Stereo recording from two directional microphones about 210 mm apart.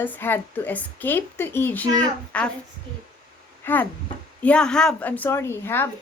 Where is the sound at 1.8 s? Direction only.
20° right (ahead or behind).